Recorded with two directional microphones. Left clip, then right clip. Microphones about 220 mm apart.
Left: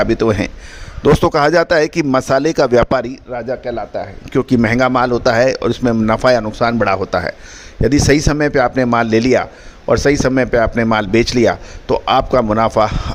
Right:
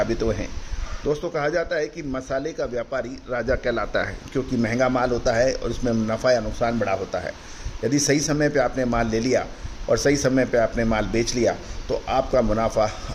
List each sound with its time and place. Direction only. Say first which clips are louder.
0.0 s speech: left 9 dB; 40° left (ahead or behind)
3.3 s speech: left 2 dB; 15° left (ahead or behind)
4.3 s speech: left 10 dB; 40° left (ahead or behind)